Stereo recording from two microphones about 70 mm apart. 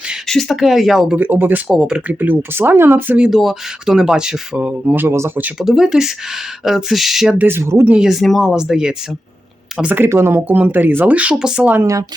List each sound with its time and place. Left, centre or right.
0.3 s speech: centre
1.1 s speech: right
1.6 s speech: centre
2.0 s speech: right
3.2 s speech: centre; by 5.3 s right
5.5 s speech: centre
7.4 s speech: right
7.9 s speech: centre
8.1 s speech: centre
8.4 s speech: centre
9.9 s speech: right
11.3 s speech: centre